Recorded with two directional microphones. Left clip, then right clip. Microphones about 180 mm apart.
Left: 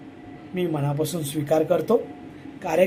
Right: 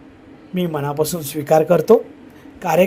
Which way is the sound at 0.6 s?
30° right (ahead or behind).